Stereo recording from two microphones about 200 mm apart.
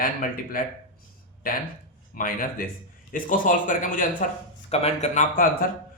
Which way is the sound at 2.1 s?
45° left (ahead or behind).